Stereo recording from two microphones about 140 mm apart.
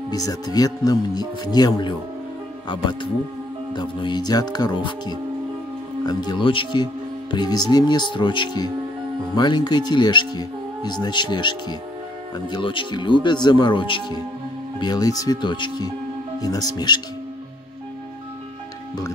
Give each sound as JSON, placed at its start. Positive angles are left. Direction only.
{"t": 0.1, "sound": "speech", "side_deg": 25}